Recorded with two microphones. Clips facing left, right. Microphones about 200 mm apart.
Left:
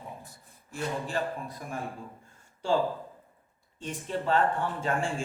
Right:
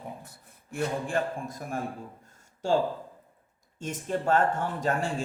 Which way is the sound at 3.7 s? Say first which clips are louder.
Right 3 dB; 45° right (ahead or behind).